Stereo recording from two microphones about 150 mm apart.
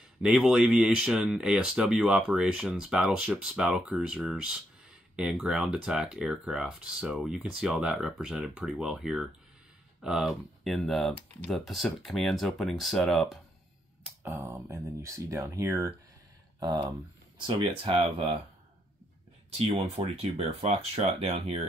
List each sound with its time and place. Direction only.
0.2 s speech: 5° right (ahead or behind)
14.2 s speech: 15° right (ahead or behind); by 18.4 s 35° right (ahead or behind)
19.5 s speech: 40° right (ahead or behind)